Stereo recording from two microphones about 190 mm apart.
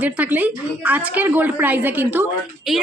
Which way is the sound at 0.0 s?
10° right (ahead or behind).